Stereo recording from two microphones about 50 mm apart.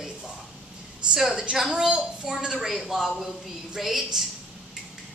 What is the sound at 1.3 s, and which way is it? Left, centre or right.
Speech, centre.